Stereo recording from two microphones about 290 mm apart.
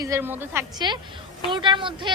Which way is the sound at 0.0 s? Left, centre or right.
Centre.